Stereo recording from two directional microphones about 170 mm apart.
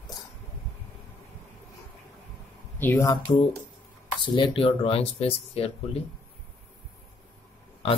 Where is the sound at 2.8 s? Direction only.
15° left (ahead or behind).